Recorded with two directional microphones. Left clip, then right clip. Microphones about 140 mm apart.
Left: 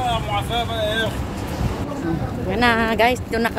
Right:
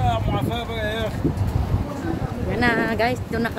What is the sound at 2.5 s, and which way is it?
Speech, 5° left (ahead or behind).